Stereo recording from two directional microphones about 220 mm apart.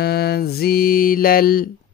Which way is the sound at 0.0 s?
45° left (ahead or behind).